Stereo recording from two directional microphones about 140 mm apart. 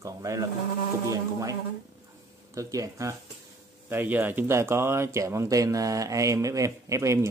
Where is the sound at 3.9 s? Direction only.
15° right (ahead or behind).